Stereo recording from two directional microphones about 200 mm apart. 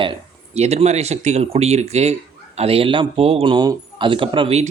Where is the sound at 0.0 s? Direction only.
30° right (ahead or behind).